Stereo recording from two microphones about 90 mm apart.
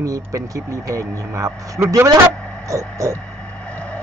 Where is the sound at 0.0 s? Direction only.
40° right (ahead or behind).